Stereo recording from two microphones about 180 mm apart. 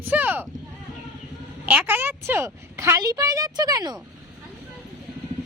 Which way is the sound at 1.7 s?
10° right (ahead or behind).